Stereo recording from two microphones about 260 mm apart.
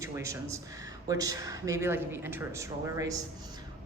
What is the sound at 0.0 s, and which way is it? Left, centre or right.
Speech, centre.